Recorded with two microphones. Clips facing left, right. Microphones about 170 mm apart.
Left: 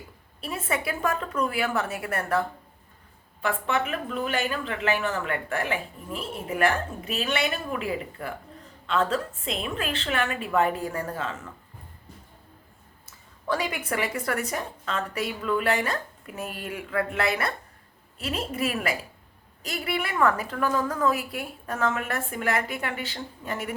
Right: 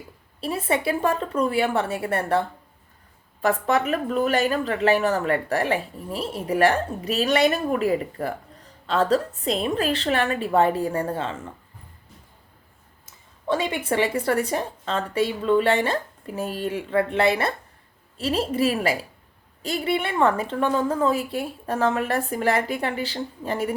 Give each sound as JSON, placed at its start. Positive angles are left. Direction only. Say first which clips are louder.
{"t": 0.4, "sound": "a woman's voice", "louder": "right 6 dB", "side_deg": -30}
{"t": 13.5, "sound": "a woman's voice", "louder": "right 4 dB", "side_deg": -25}